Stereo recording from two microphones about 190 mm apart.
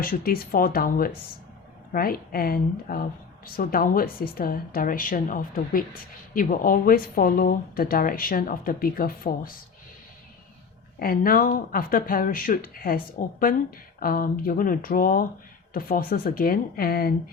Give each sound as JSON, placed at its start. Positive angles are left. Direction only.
{"t": 0.0, "sound": "a woman's voice", "side_deg": 50}
{"t": 11.0, "sound": "a woman's voice", "side_deg": 50}